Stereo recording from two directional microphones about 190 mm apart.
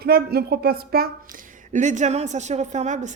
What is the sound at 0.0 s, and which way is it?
A woman's voice, 55° right (ahead or behind).